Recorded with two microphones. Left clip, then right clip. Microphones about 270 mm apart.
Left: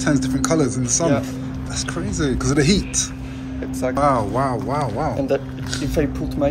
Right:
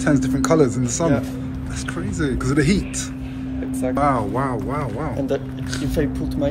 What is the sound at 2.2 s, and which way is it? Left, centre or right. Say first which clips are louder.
Speech: left 1 dB; centre.